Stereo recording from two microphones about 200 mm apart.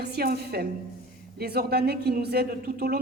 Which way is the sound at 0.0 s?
50° right (ahead or behind).